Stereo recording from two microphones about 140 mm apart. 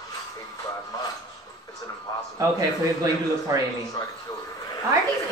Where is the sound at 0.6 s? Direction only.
25° left (ahead or behind).